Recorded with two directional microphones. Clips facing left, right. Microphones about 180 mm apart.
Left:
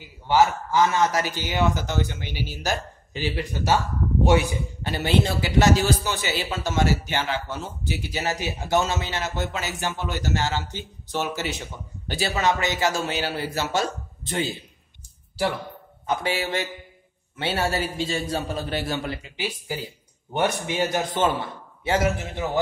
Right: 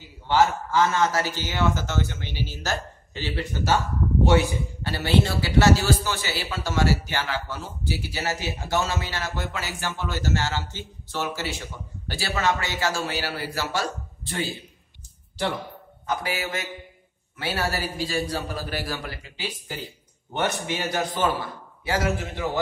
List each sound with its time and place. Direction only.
0.3 s a man's voice: 15° left (ahead or behind)
4.8 s a man's voice: 20° left (ahead or behind)
16.1 s a man's voice: 25° left (ahead or behind)